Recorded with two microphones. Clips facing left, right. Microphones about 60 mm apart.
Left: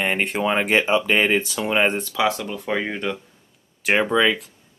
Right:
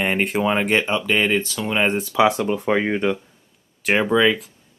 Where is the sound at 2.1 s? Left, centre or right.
Centre.